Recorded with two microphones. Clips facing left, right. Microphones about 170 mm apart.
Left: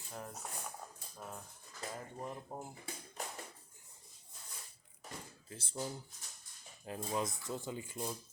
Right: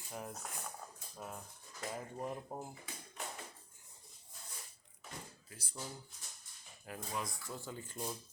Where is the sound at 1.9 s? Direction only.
10° right (ahead or behind).